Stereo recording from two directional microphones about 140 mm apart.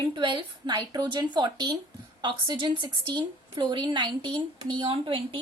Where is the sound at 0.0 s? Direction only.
35° right (ahead or behind).